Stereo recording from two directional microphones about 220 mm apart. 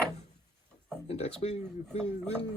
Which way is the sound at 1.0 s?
30° left (ahead or behind).